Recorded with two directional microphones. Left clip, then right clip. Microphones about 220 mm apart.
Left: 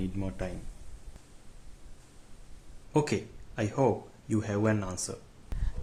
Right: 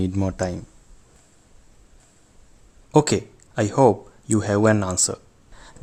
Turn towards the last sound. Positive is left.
turn(degrees=-35)  # may be behind; listen again after turning